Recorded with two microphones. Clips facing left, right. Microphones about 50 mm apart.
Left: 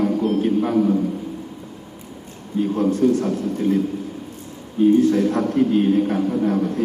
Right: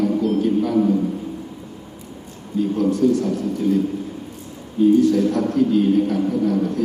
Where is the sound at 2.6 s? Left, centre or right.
Left.